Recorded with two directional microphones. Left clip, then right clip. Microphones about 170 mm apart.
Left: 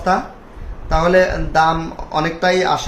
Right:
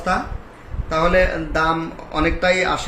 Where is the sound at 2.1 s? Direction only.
90° left.